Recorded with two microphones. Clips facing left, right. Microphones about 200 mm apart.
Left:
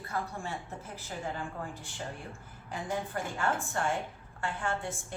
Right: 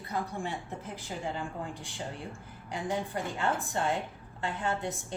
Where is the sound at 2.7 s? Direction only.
15° right (ahead or behind).